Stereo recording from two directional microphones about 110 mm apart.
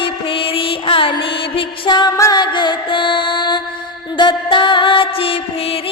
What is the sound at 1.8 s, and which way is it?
Music, 45° left (ahead or behind).